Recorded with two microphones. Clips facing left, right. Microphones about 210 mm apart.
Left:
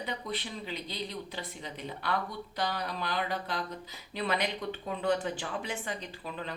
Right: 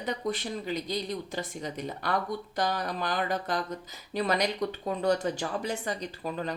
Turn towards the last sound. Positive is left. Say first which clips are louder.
# right 6 dB
turn(degrees=-40)  # may be behind; listen again after turning